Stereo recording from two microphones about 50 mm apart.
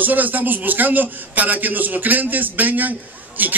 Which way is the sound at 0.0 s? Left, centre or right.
Right.